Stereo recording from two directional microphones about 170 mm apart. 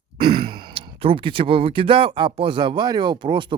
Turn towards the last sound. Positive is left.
turn(degrees=-30)  # may be behind; listen again after turning